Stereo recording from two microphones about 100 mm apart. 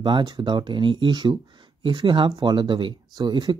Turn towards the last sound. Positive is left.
turn(degrees=-50)  # may be behind; listen again after turning